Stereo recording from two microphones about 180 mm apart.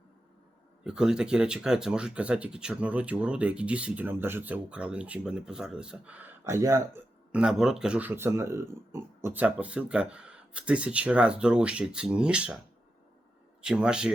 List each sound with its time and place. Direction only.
0.9 s speech: 5° right (ahead or behind)
7.3 s speech: 5° right (ahead or behind)
13.6 s speech: 5° right (ahead or behind)